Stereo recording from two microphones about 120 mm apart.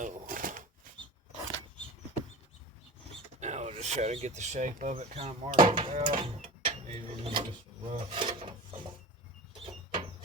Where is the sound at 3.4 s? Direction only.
75° right (ahead or behind).